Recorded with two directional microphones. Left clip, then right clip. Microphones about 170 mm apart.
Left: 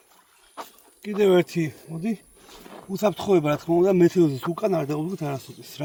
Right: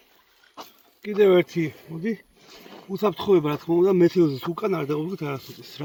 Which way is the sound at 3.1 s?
45° left (ahead or behind).